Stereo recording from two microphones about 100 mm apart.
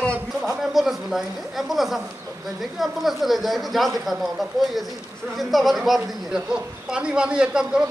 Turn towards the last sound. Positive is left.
turn(degrees=-10)  # may be behind; listen again after turning